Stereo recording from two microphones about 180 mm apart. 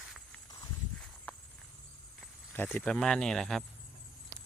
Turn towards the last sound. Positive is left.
turn(degrees=5)  # may be behind; listen again after turning